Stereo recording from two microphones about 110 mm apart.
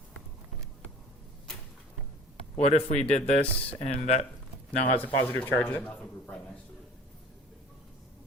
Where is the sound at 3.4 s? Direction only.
60° left (ahead or behind).